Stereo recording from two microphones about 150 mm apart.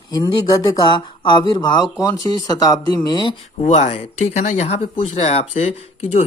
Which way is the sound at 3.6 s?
50° left (ahead or behind).